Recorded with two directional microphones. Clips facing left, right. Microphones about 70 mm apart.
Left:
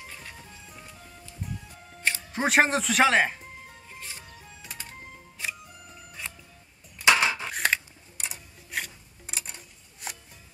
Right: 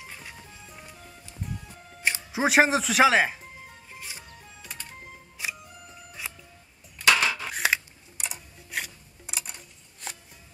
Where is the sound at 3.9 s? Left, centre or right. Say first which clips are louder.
Even; centre.